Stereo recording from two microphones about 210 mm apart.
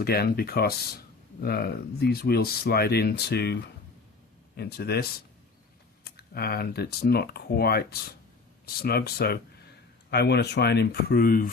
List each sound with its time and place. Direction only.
0.0 s speech: 45° left (ahead or behind)
6.1 s speech: 50° left (ahead or behind)